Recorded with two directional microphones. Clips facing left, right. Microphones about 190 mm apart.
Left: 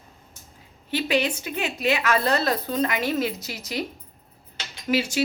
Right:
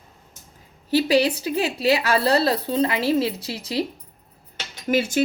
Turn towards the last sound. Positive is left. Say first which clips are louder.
# right 3 dB
turn(degrees=-50)  # may be behind; listen again after turning